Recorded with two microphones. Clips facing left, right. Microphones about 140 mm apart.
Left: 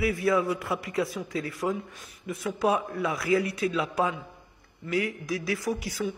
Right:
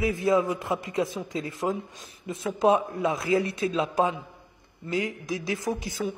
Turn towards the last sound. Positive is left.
turn(degrees=-20)  # may be behind; listen again after turning